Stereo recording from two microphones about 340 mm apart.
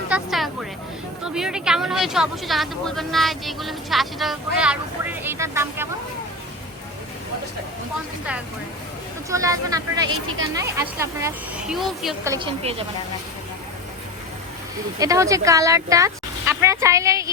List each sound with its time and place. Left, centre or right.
0.1 s a sound: centre
1.2 s speech: centre
9.3 s speech: centre
10.1 s speech: right
10.5 s speech: centre
14.9 s speech: centre